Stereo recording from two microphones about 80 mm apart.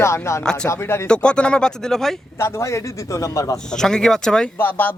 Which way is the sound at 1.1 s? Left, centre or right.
Centre.